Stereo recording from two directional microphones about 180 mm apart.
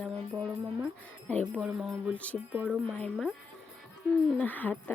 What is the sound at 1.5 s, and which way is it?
Speech, centre (ahead or behind).